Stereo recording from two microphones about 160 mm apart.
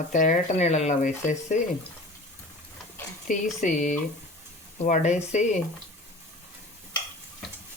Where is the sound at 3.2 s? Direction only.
50° left (ahead or behind).